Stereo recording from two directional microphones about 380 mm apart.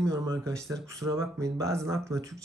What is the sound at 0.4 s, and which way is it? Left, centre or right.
Speech, centre.